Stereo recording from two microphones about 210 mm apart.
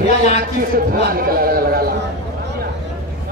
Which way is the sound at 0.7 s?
45° right (ahead or behind).